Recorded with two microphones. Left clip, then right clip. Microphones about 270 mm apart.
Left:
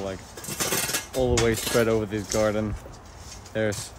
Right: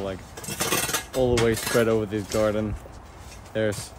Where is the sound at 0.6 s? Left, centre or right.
Right.